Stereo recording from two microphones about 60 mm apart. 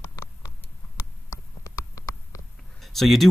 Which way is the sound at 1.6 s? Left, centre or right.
Left.